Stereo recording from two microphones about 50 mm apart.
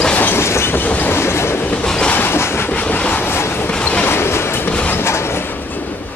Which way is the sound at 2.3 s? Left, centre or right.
Left.